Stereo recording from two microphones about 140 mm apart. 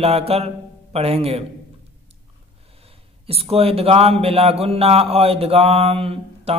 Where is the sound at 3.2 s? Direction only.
45° right (ahead or behind).